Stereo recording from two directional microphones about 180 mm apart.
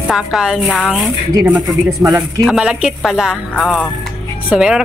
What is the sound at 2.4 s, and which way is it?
Speech, 5° right (ahead or behind).